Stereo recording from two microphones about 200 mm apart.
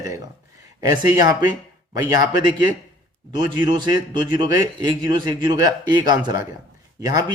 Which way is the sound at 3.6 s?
20° right (ahead or behind).